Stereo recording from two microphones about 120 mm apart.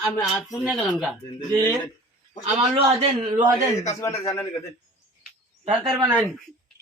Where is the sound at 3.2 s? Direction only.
90° right.